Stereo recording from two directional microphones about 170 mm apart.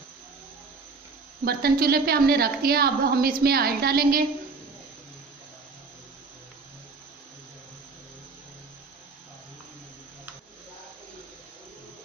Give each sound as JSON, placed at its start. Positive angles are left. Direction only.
{"t": 1.5, "sound": "a woman's voice", "side_deg": -65}